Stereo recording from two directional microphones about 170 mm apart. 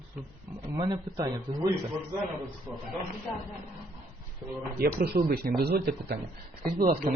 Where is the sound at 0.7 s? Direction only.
25° right (ahead or behind).